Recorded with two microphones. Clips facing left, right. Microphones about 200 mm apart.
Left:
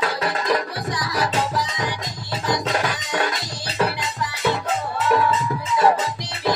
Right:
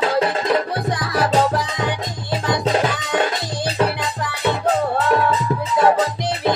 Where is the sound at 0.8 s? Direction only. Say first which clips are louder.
Right 4 dB; 55° right (ahead or behind).